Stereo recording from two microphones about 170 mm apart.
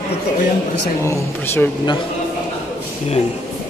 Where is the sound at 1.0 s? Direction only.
15° left (ahead or behind).